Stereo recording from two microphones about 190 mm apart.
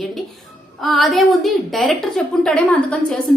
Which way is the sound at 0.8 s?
Centre (ahead or behind).